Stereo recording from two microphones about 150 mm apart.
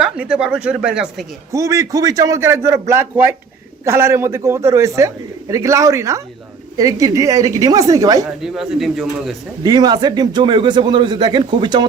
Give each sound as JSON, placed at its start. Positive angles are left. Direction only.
{"t": 0.0, "sound": "speech", "side_deg": -5}
{"t": 1.5, "sound": "a man's voice", "side_deg": -20}
{"t": 8.4, "sound": "speech", "side_deg": -5}
{"t": 9.6, "sound": "a man's voice", "side_deg": -25}